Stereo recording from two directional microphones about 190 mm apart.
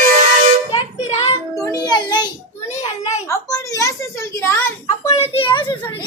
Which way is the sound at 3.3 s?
15° left (ahead or behind).